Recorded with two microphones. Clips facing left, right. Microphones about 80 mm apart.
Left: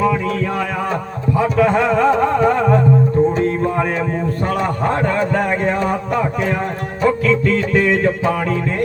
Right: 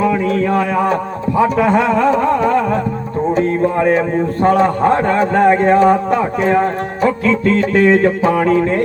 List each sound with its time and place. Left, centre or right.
1.4 s a sound: centre
4.4 s speech: right
6.4 s music: right